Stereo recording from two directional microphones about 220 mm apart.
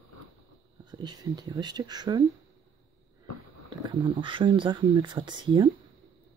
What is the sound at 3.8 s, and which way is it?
Speech, 20° right (ahead or behind).